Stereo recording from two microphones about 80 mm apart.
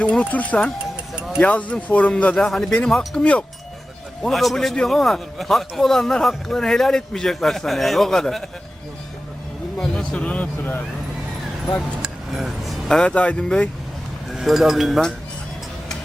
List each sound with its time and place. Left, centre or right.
0.0 s a man's voice: centre
9.7 s speech: centre
12.0 s speech: centre
13.0 s speech: centre
14.3 s a man's voice: centre